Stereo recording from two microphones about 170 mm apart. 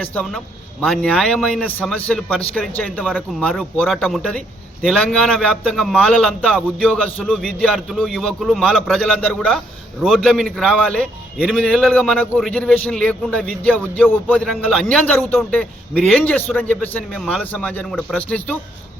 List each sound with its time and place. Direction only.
0.0 s a man's voice: 5° left (ahead or behind)